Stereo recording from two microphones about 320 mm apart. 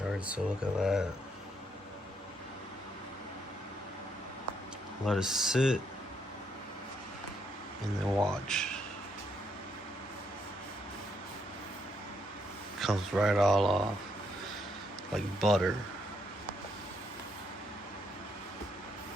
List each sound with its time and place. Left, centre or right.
0.1 s speech: centre
5.0 s speech: centre
8.1 s speech: centre
12.8 s speech: centre
15.1 s speech: centre